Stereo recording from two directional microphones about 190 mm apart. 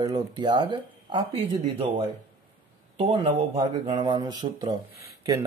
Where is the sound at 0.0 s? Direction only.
25° right (ahead or behind).